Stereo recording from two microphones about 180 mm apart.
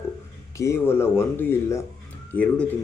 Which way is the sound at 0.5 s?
15° left (ahead or behind).